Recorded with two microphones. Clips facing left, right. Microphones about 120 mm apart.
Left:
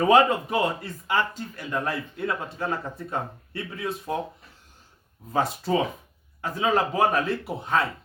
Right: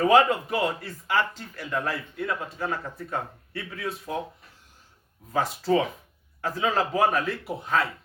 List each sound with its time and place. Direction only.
0.1 s speech: 20° left (ahead or behind)
5.3 s speech: 25° left (ahead or behind)